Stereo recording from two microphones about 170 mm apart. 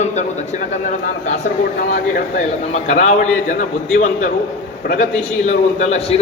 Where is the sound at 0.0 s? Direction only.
45° left (ahead or behind).